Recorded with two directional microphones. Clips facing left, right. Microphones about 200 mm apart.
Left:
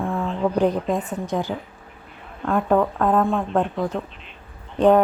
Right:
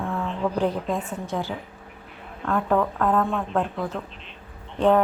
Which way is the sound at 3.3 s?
30° left (ahead or behind).